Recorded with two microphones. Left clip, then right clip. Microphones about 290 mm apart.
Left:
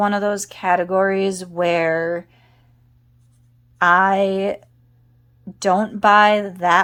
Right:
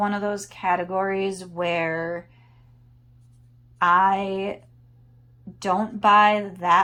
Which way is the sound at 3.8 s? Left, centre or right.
Centre.